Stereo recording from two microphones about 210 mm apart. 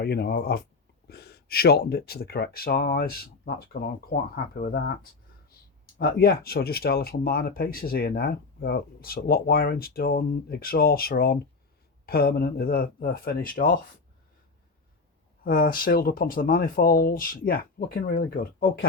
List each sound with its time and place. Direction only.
0.0 s speech: 50° left (ahead or behind)
6.0 s speech: 45° left (ahead or behind)
15.4 s speech: 45° left (ahead or behind)